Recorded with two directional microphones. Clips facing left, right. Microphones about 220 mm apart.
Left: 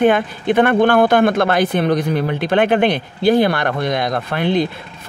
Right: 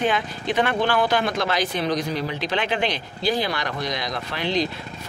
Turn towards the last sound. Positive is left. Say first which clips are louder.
# left 7 dB
turn(degrees=55)  # may be behind; listen again after turning